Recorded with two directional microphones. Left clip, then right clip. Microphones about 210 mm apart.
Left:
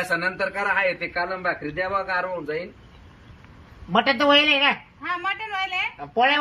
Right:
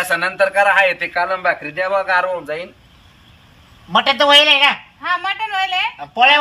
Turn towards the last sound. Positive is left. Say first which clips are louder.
# right 7 dB
turn(degrees=-25)  # may be behind; listen again after turning